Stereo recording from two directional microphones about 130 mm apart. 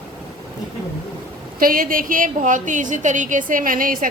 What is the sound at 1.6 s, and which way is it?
A woman's voice, 90° right.